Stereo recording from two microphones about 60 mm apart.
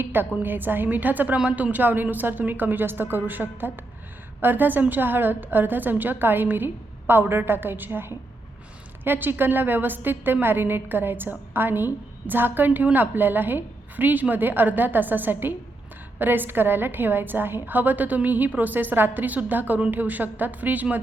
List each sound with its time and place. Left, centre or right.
0.0 s a woman's voice: right